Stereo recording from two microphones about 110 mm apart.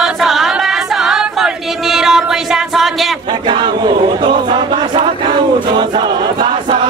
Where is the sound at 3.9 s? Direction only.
50° right (ahead or behind).